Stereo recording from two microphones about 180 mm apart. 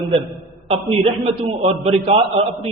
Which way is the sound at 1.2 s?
35° right (ahead or behind).